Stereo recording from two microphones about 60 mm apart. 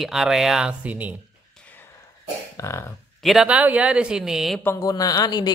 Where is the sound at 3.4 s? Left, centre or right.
Right.